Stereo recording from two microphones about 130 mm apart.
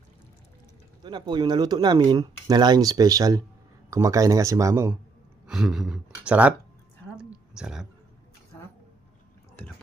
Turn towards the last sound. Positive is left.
turn(degrees=-5)  # may be behind; listen again after turning